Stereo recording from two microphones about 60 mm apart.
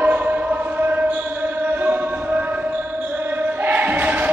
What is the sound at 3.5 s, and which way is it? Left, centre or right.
Choir, right.